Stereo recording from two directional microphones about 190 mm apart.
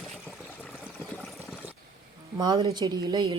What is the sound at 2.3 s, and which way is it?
Speech, 25° right (ahead or behind).